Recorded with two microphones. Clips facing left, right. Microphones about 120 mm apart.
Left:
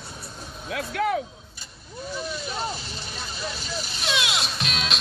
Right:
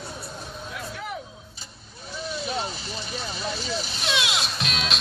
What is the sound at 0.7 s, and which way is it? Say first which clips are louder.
Music: left 11 dB; 85° left.